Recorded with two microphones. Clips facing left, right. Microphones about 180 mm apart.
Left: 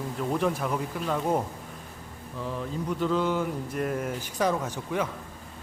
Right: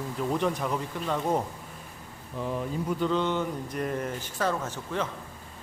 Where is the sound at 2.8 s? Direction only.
Centre (ahead or behind).